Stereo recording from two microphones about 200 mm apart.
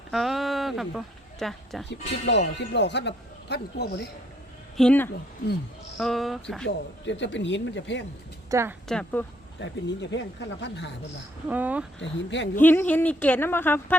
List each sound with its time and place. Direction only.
0.1 s a woman's voice: centre (ahead or behind)
1.9 s speech: 60° left (ahead or behind)
4.8 s speech: 5° left (ahead or behind)
6.7 s speech: 65° left (ahead or behind)
8.4 s a woman's voice: 15° right (ahead or behind)
8.9 s speech: 5° left (ahead or behind)
9.6 s speech: 60° left (ahead or behind)
11.4 s speech: 10° right (ahead or behind)
11.9 s speech: 65° left (ahead or behind)
12.5 s a woman's voice: 10° left (ahead or behind)